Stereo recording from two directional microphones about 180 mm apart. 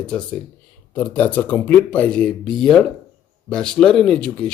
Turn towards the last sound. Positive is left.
turn(degrees=5)  # may be behind; listen again after turning